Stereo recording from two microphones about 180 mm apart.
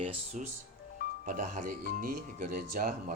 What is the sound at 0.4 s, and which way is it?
Speech, 45° right (ahead or behind).